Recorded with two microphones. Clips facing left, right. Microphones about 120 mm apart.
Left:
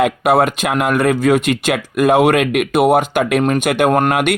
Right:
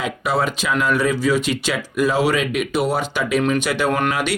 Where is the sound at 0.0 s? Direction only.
60° left (ahead or behind).